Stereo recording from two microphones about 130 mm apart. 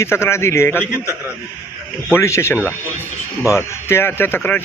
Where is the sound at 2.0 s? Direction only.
20° left (ahead or behind).